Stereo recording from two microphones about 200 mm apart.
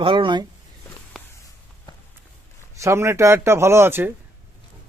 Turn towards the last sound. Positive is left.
turn(degrees=-10)  # may be behind; listen again after turning